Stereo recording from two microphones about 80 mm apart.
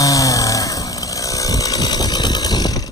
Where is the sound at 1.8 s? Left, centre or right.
Left.